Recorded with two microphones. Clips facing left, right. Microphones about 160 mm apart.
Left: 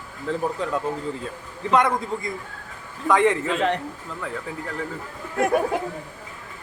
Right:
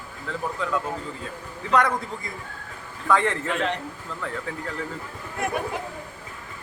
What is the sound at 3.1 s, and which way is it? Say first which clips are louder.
Speech: left 3 dB; 15° left (ahead or behind).